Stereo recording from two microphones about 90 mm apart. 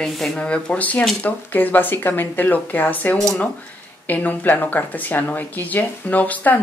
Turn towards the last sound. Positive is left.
turn(degrees=20)  # may be behind; listen again after turning